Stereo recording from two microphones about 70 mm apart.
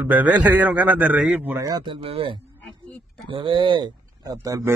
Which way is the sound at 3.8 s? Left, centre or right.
Right.